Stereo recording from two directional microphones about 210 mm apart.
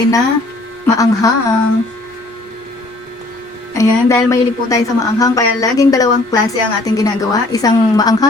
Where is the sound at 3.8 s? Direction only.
15° left (ahead or behind).